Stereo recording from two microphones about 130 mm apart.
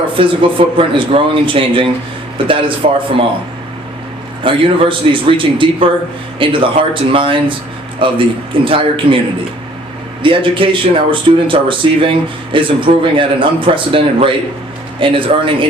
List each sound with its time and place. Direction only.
0.1 s speech: 40° right (ahead or behind)
2.8 s a man's voice: 60° right (ahead or behind)
4.4 s speech: 40° right (ahead or behind)
10.2 s speech: 40° right (ahead or behind)